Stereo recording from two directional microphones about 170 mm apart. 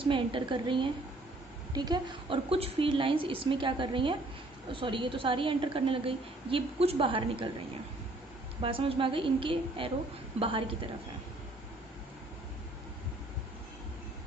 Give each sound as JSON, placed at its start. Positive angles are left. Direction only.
{"t": 0.0, "sound": "a woman's voice", "side_deg": -30}
{"t": 8.5, "sound": "a woman's voice", "side_deg": -30}